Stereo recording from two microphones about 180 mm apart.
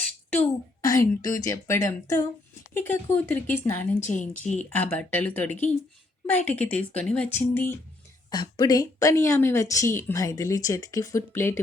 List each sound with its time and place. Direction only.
0.4 s a woman's voice: 20° left (ahead or behind)
4.1 s speech: 40° left (ahead or behind)
4.7 s a woman's voice: 10° left (ahead or behind)
8.3 s a woman's voice: 25° left (ahead or behind)